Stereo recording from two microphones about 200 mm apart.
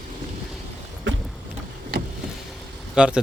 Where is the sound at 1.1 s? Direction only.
70° right (ahead or behind).